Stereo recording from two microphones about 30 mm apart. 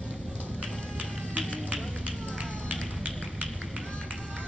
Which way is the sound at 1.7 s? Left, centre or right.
Right.